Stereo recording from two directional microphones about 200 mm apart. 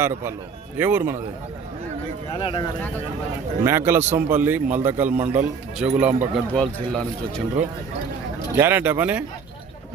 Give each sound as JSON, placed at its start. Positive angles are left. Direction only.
{"t": 0.0, "sound": "a man's voice", "side_deg": -10}
{"t": 2.4, "sound": "speech", "side_deg": 25}
{"t": 3.6, "sound": "a man's voice", "side_deg": -10}
{"t": 6.6, "sound": "speech", "side_deg": 5}
{"t": 8.5, "sound": "a man's voice", "side_deg": -10}